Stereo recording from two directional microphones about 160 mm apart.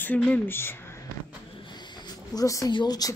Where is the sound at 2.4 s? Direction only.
20° left (ahead or behind).